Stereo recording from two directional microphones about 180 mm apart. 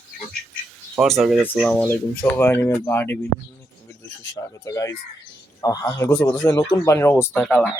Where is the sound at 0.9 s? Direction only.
Centre (ahead or behind).